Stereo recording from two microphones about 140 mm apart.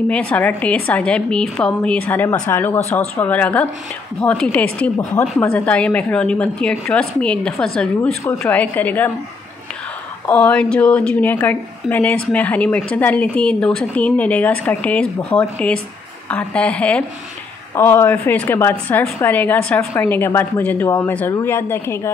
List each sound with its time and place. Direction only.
0.1 s a woman's voice: 10° left (ahead or behind)
10.2 s a woman's voice: 10° left (ahead or behind)